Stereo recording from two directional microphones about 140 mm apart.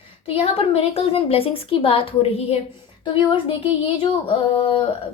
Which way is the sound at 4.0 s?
40° left (ahead or behind).